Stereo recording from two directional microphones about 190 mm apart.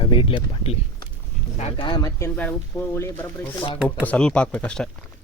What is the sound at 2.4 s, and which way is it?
Speech, 10° left (ahead or behind).